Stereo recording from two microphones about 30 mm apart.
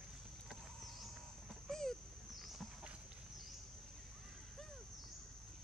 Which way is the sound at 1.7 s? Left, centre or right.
Centre.